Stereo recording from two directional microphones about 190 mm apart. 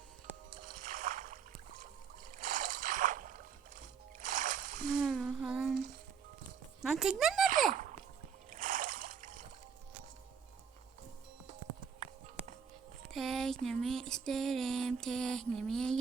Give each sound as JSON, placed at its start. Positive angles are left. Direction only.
{"t": 0.6, "sound": "rowboat", "side_deg": -45}
{"t": 2.4, "sound": "boat", "side_deg": -45}
{"t": 4.2, "sound": "music", "side_deg": -45}
{"t": 4.9, "sound": "humming", "side_deg": -5}
{"t": 6.8, "sound": "speech", "side_deg": 0}
{"t": 7.7, "sound": "a sound", "side_deg": -40}
{"t": 13.1, "sound": "a sound", "side_deg": 0}
{"t": 13.7, "sound": "music", "side_deg": 0}